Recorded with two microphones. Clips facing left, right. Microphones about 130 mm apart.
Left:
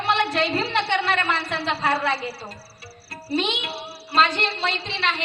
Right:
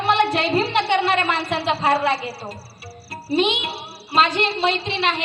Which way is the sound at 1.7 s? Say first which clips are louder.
Right 4 dB; 30° right (ahead or behind).